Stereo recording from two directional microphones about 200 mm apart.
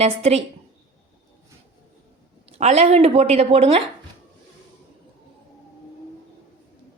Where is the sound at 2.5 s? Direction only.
30° right (ahead or behind).